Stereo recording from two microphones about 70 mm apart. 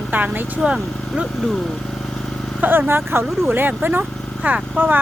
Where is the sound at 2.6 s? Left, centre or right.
Right.